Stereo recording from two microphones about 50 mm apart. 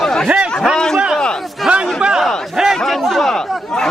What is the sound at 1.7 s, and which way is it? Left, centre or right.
Speech, right.